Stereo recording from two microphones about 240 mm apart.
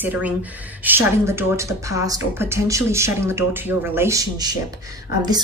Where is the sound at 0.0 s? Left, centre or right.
Centre.